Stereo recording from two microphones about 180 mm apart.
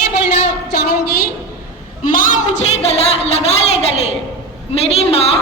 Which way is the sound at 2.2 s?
45° left (ahead or behind).